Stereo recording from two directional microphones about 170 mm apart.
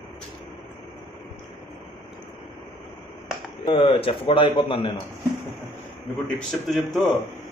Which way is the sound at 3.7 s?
30° left (ahead or behind).